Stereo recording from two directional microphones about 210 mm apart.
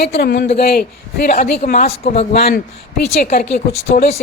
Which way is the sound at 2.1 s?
30° left (ahead or behind).